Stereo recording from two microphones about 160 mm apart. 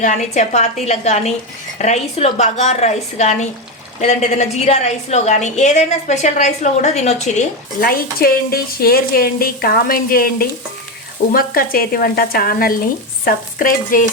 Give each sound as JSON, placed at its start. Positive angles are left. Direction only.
{"t": 0.0, "sound": "a woman's voice", "side_deg": 50}
{"t": 7.8, "sound": "a woman's voice", "side_deg": 70}
{"t": 13.2, "sound": "stir", "side_deg": 60}